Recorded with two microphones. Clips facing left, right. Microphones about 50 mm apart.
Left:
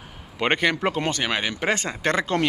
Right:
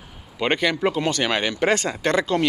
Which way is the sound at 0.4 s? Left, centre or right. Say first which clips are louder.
Even; left.